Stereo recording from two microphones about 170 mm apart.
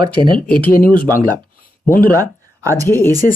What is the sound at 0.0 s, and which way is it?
Speech, 25° right (ahead or behind).